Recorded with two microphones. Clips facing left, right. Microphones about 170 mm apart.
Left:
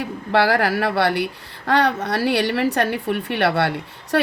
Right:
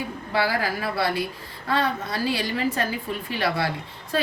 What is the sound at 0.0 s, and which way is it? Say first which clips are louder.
A woman's voice: left 6 dB; 75° left (ahead or behind).